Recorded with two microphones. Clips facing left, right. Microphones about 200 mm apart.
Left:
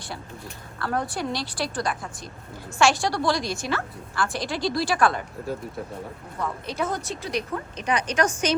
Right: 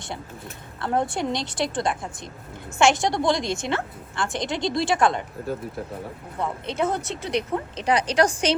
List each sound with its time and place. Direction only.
0.8 s a woman's voice: 25° right (ahead or behind)
6.4 s a woman's voice: 25° right (ahead or behind)